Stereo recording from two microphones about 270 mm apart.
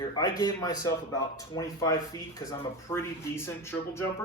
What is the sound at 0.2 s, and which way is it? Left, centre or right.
Speech, centre.